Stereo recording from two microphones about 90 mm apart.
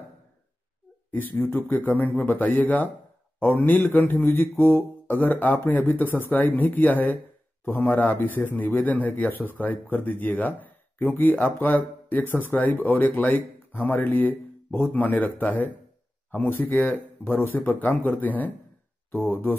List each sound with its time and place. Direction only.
1.1 s mantra: 20° left (ahead or behind)